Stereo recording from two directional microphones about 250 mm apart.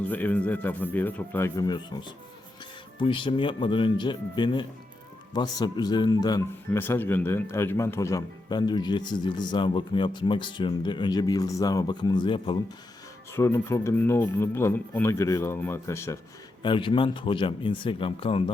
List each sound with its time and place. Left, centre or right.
0.1 s speech: centre